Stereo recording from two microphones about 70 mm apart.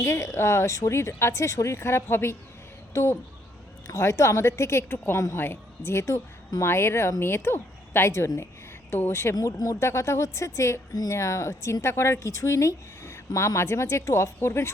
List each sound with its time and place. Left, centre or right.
0.0 s a woman's voice: left